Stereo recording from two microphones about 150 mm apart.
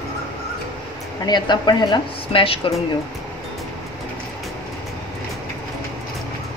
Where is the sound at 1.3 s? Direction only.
30° left (ahead or behind).